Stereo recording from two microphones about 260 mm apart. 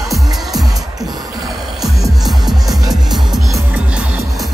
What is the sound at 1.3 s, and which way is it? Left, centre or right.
Music, centre.